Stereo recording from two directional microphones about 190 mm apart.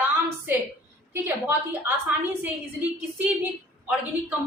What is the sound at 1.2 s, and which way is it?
A woman's voice, 10° right (ahead or behind).